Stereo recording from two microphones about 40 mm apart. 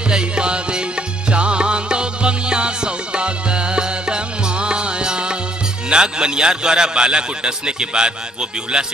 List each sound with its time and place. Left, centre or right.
0.1 s music: right
5.9 s a man's voice: right